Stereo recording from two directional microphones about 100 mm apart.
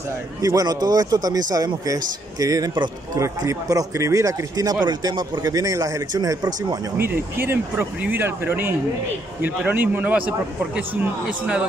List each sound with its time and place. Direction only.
0.4 s a man's voice: 35° right (ahead or behind)
4.8 s a man's voice: 45° right (ahead or behind)
7.0 s a man's voice: 20° right (ahead or behind)